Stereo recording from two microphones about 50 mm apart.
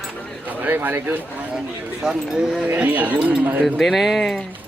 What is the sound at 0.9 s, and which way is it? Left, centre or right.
Speech, right.